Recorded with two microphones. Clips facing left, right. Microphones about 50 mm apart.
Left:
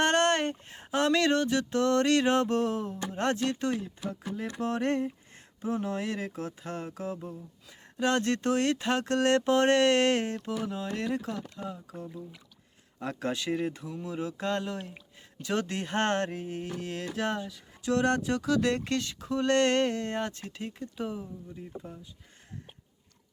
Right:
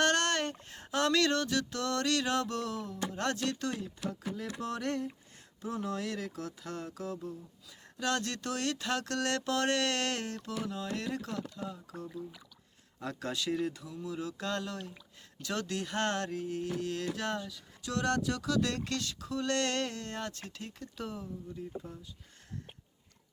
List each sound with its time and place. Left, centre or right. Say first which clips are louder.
0.0 s a sound: left 4 dB; left
4.6 s speech: left 7 dB; left
13.0 s speech: left 4 dB; left